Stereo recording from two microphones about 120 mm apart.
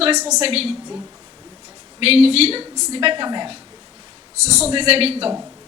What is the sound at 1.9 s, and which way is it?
A woman's voice, 55° right (ahead or behind).